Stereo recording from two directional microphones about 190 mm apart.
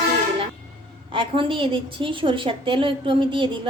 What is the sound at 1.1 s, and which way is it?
A woman's voice, 25° right (ahead or behind).